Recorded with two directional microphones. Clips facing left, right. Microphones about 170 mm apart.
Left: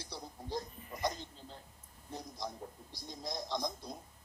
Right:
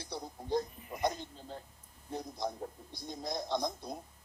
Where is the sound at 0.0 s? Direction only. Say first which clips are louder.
Right 4 dB; 55° right (ahead or behind).